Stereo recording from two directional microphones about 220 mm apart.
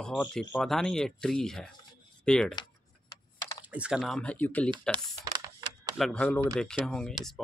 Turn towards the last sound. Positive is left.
turn(degrees=5)  # may be behind; listen again after turning